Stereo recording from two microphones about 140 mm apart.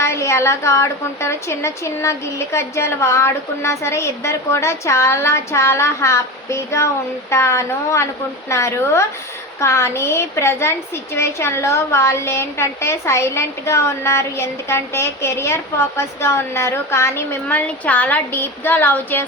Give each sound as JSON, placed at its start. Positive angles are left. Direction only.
{"t": 0.0, "sound": "a woman's voice", "side_deg": 20}